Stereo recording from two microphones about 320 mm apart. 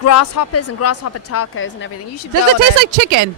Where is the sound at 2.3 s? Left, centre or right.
Right.